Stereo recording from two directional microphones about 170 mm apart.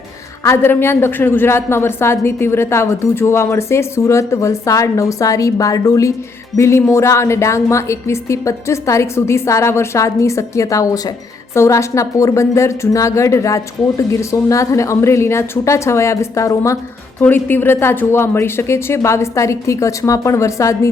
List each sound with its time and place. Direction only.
0.4 s a woman's voice: 15° left (ahead or behind)